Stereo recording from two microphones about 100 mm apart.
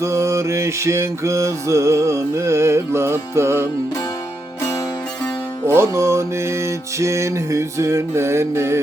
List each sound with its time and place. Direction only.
0.0 s mantra: 30° right (ahead or behind)
5.6 s mantra: 25° right (ahead or behind)